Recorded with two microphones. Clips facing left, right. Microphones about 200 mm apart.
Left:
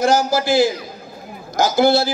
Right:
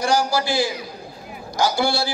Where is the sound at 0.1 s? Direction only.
45° left (ahead or behind).